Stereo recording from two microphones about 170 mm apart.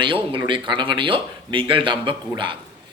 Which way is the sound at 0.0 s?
30° right (ahead or behind).